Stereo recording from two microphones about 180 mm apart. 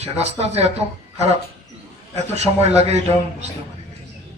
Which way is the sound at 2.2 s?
35° right (ahead or behind).